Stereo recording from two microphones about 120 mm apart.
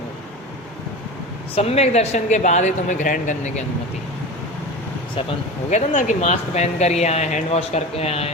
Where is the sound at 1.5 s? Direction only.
60° left (ahead or behind); by 3.6 s 80° left.